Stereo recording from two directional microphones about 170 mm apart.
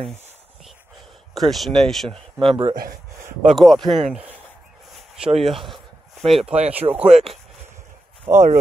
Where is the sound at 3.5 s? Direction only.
Centre (ahead or behind).